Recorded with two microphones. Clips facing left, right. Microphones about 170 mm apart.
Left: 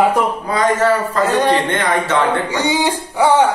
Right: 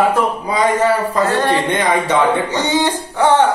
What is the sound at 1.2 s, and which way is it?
Speech, 15° left (ahead or behind).